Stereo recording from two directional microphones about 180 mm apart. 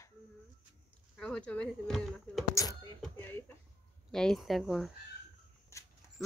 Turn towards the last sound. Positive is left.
turn(degrees=15)  # may be behind; listen again after turning